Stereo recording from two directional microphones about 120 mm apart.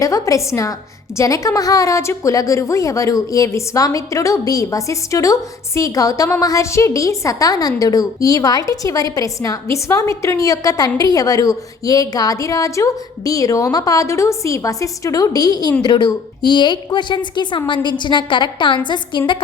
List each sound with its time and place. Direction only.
0.0 s a woman's voice: 25° left (ahead or behind)